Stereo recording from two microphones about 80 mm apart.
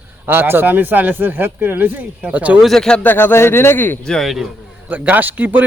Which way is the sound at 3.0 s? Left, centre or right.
Left.